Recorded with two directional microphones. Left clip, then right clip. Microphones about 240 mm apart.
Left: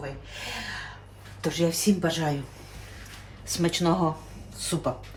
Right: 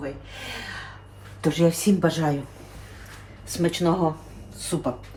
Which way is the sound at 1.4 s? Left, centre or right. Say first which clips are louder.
Right 4 dB; right.